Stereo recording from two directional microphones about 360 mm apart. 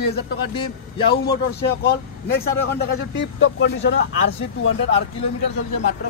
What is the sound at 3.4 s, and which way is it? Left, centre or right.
Speech, left.